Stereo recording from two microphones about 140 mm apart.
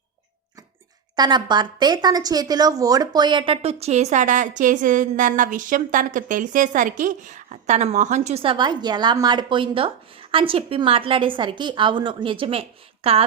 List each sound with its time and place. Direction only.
1.1 s a woman's voice: 30° right (ahead or behind)